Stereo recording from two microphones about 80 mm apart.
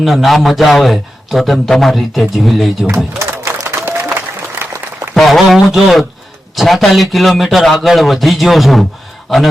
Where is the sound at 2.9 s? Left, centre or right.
Right.